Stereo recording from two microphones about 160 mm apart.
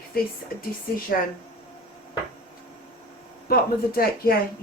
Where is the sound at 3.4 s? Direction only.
70° left (ahead or behind).